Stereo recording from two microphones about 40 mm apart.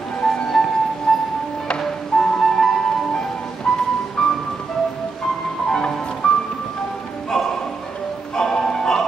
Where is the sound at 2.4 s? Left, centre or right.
Centre.